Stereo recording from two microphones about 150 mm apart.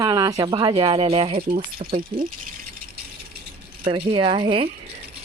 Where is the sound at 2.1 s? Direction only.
75° right (ahead or behind).